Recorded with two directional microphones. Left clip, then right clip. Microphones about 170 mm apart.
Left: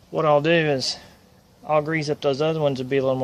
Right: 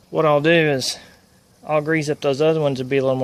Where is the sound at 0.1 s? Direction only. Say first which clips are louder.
Right 3 dB; 40° right (ahead or behind).